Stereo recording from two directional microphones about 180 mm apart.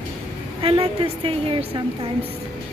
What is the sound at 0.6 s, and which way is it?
A woman's voice, 30° right (ahead or behind).